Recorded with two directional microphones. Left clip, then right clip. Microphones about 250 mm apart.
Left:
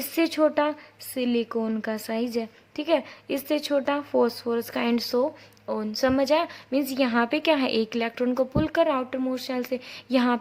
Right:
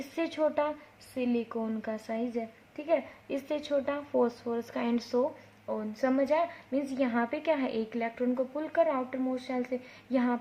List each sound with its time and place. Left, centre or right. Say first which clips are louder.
0.2 s a woman's voice: left 7 dB; left